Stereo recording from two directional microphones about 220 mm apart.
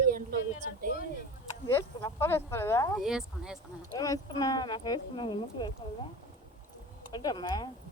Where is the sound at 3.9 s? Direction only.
15° left (ahead or behind).